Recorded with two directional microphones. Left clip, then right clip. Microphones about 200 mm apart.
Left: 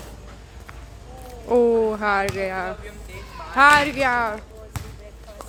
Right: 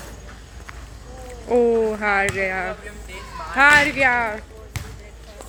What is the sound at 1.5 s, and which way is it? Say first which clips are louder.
Speech: even; 10° left (ahead or behind).